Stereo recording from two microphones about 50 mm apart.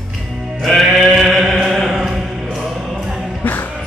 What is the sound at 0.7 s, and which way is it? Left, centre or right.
Sheep, centre.